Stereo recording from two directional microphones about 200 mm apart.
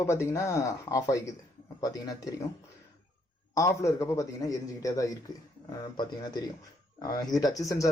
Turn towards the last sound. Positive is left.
turn(degrees=15)  # may be behind; listen again after turning